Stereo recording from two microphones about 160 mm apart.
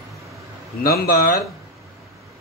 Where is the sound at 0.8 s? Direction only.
70° left (ahead or behind).